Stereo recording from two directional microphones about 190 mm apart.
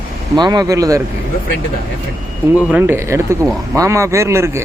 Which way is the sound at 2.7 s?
10° right (ahead or behind).